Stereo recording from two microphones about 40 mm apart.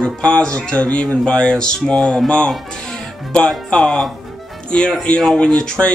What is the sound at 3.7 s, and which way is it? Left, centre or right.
Speech, centre.